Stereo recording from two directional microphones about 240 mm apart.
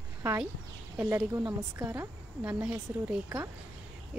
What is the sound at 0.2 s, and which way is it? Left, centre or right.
A woman's voice, centre.